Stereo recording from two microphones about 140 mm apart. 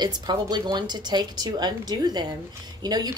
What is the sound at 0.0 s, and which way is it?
A woman's voice, 30° right (ahead or behind).